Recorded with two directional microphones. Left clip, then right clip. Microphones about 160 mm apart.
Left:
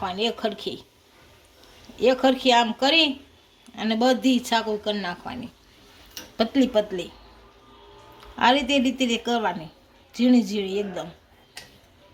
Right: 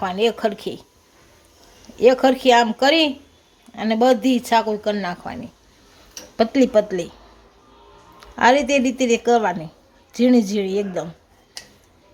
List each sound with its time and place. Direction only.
0.0 s speech: 30° right (ahead or behind)
2.0 s speech: 30° right (ahead or behind)
6.5 s speech: 30° right (ahead or behind)
8.4 s speech: 35° right (ahead or behind)